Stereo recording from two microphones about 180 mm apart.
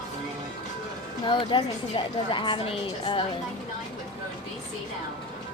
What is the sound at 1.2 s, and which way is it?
A woman's voice, 25° left (ahead or behind).